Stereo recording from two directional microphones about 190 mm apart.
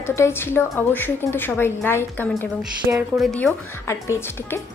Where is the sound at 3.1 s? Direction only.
Centre (ahead or behind).